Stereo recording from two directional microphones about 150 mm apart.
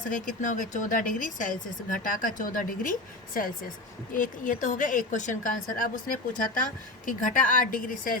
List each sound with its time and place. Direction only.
0.1 s a woman's voice: 60° left (ahead or behind)